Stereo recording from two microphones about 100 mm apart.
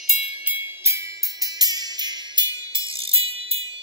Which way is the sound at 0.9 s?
40° right (ahead or behind).